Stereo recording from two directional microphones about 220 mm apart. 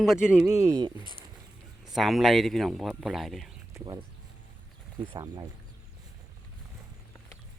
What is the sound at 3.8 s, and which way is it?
Speech, 20° right (ahead or behind).